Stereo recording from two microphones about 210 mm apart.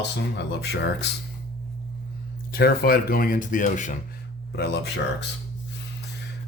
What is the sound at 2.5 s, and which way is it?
Speech, 45° left (ahead or behind).